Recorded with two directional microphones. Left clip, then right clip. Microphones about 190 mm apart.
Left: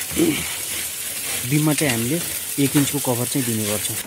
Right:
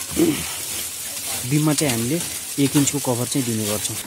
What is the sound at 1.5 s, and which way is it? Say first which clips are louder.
Speech: even; centre (ahead or behind).